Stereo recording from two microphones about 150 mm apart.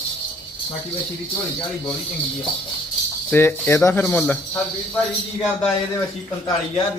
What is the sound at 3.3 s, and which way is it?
A man's voice, 15° left (ahead or behind).